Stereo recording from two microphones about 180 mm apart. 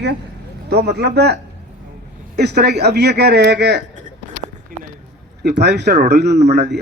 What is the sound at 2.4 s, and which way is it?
A man's voice, 65° right (ahead or behind).